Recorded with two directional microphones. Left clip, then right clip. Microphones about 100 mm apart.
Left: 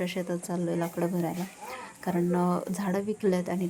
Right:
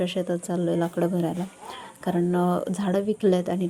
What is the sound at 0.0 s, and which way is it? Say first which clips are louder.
Speech: right 5 dB; 30° right (ahead or behind).